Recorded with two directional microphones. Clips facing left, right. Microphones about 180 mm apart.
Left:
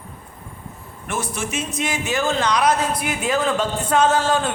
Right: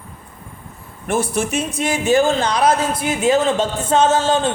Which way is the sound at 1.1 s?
30° right (ahead or behind).